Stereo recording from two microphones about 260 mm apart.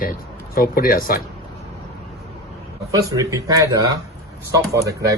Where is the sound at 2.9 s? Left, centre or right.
Centre.